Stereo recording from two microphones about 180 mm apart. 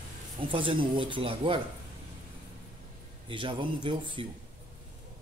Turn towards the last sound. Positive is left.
turn(degrees=-25)  # may be behind; listen again after turning